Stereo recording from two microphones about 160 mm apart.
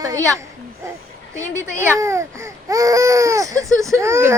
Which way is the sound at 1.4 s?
15° right (ahead or behind).